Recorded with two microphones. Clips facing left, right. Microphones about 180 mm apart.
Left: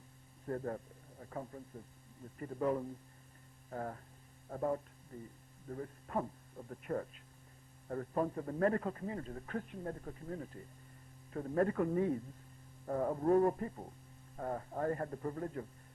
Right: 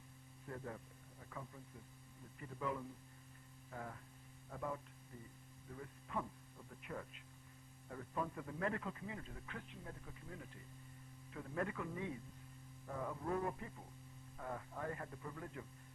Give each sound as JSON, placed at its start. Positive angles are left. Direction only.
{"t": 0.4, "sound": "a man's voice", "side_deg": 45}